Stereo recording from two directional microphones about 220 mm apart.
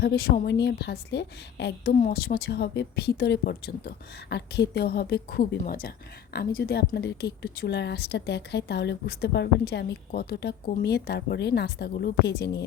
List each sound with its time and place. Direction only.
0.0 s speech: 45° left (ahead or behind)